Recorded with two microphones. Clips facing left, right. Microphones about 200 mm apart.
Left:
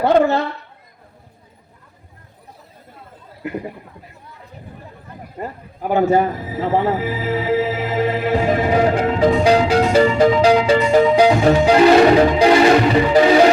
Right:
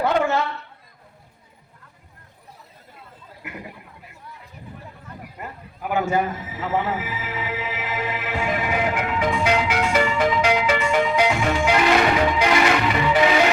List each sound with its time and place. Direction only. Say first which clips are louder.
0.0 s a woman's voice: left 6 dB; 35° left (ahead or behind)
5.4 s speech: left 7 dB; 35° left (ahead or behind)